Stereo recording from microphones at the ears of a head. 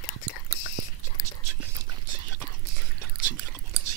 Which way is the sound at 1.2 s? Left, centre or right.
Right.